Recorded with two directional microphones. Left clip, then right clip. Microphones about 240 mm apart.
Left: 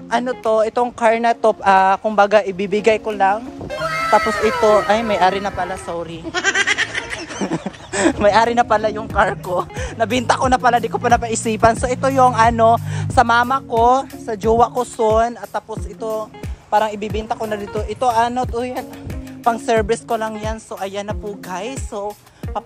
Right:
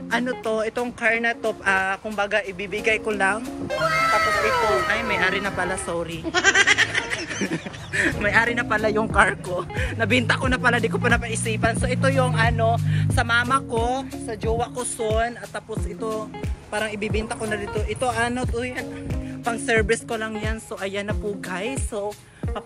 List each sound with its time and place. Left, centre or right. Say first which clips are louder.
0.1 s speech: left 7 dB; centre
3.1 s speech: left 6 dB; centre
5.1 s speech: left 6 dB; centre
5.6 s speech: left 2 dB; centre
7.6 s speech: left 6 dB; centre
13.5 s speech: left 5 dB; centre
13.8 s speech: left 11 dB; left
16.9 s speech: left 4 dB; centre